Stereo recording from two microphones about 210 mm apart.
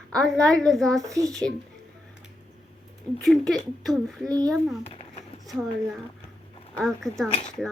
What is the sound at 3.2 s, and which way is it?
Speech, centre (ahead or behind).